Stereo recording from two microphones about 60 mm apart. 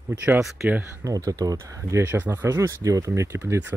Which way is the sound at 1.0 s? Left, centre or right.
Right.